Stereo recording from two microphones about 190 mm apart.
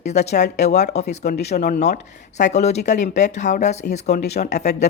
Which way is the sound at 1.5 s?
55° left (ahead or behind).